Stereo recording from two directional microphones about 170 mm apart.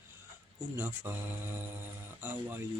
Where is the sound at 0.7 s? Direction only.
15° right (ahead or behind).